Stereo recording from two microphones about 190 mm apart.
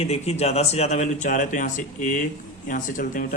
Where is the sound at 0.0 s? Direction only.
35° left (ahead or behind).